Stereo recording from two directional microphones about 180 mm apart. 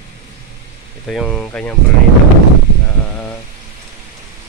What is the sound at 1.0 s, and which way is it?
Speech, centre (ahead or behind).